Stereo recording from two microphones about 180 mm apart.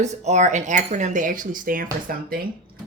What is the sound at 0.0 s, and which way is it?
A woman's voice, 40° right (ahead or behind).